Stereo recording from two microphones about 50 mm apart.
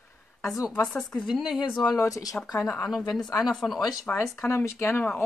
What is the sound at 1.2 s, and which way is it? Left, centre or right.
Speech, centre.